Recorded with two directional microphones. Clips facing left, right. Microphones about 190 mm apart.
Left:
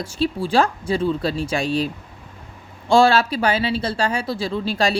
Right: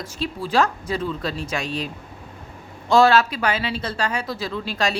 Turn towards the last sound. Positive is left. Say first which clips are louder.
# left 4 dB
turn(degrees=30)  # may be behind; listen again after turning